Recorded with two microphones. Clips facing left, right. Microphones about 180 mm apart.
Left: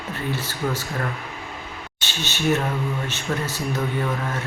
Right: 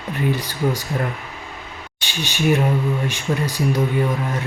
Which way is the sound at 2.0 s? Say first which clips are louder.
Right 4 dB; 15° right (ahead or behind).